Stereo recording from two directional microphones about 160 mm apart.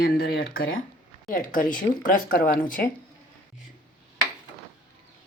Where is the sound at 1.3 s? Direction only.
60° left (ahead or behind).